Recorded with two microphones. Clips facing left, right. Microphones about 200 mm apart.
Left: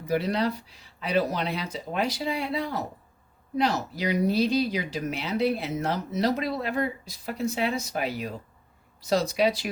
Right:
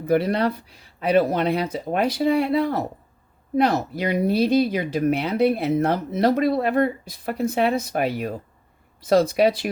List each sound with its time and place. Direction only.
0.0 s speech: 55° right (ahead or behind)